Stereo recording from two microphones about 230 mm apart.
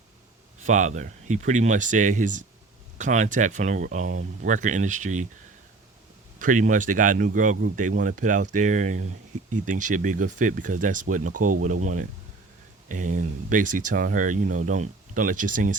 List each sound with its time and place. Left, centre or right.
0.6 s speech: right
6.4 s speech: right
11.4 s speech: right
11.8 s speech: right